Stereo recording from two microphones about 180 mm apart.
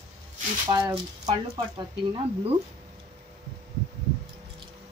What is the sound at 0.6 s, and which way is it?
Speech, 25° right (ahead or behind).